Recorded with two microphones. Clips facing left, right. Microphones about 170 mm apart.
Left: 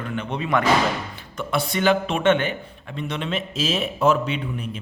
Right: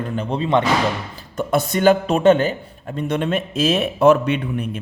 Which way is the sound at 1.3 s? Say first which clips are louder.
Right 5 dB; 45° right (ahead or behind).